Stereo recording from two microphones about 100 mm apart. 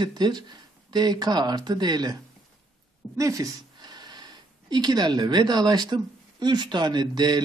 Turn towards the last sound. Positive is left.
turn(degrees=-45)  # may be behind; listen again after turning